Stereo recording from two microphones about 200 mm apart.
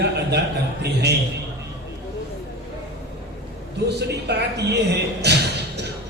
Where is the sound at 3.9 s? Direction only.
55° right (ahead or behind).